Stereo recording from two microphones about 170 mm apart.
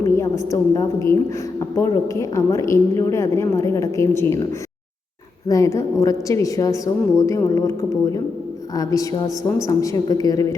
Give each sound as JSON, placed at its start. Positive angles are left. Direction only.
{"t": 0.0, "sound": "a woman's voice", "side_deg": 15}
{"t": 5.5, "sound": "a woman's voice", "side_deg": 20}